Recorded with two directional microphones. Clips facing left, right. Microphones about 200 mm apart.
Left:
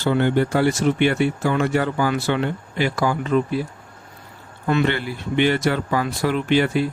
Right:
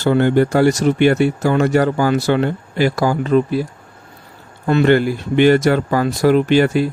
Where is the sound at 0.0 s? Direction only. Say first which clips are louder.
Right 5 dB; 45° right (ahead or behind).